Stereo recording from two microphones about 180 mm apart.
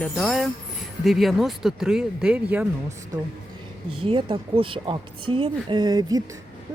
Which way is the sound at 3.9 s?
30° right (ahead or behind).